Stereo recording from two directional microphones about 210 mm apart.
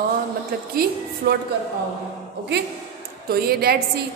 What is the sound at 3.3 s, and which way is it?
Speech, 45° right (ahead or behind).